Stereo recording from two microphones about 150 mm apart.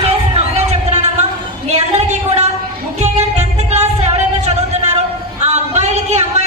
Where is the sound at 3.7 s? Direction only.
45° right (ahead or behind).